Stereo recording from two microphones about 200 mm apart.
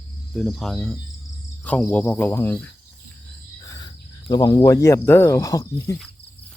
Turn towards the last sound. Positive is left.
turn(degrees=15)  # may be behind; listen again after turning